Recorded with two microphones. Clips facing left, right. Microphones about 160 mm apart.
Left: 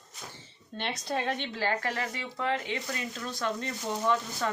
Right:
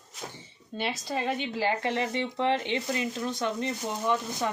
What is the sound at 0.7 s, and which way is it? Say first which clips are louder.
Speech: right 1 dB; 5° right (ahead or behind).